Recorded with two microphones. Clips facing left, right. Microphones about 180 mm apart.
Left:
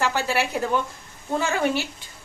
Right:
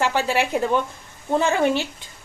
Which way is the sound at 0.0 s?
15° right (ahead or behind).